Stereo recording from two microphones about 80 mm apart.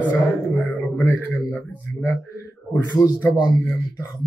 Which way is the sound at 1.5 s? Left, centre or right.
Left.